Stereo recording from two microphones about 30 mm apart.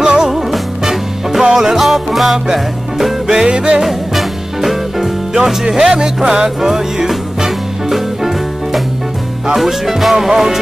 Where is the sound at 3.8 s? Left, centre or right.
Centre.